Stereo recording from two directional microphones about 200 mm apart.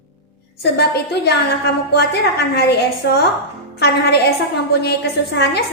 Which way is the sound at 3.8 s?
55° left (ahead or behind).